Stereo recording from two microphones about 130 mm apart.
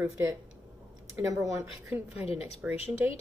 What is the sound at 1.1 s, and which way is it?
Speech, 25° right (ahead or behind).